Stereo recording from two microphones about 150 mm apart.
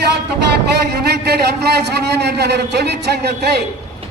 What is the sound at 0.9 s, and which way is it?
A man's voice, 90° right.